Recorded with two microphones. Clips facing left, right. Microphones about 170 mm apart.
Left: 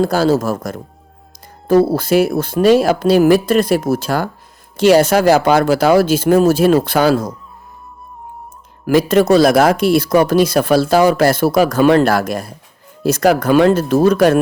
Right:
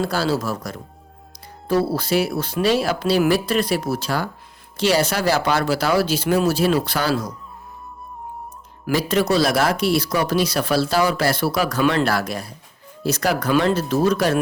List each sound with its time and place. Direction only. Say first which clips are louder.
0.0 s speech: left 8 dB; 45° left (ahead or behind)
8.9 s speech: left 8 dB; 50° left (ahead or behind)